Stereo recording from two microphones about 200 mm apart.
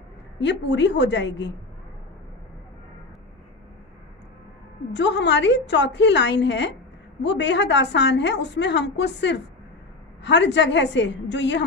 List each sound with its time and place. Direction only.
0.4 s a woman's voice: 60° left (ahead or behind)
4.9 s a woman's voice: 60° left (ahead or behind)